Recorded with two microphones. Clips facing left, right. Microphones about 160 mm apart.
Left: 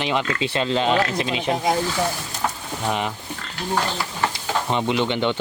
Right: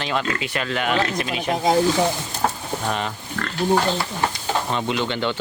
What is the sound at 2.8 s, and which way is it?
Speech, 15° left (ahead or behind).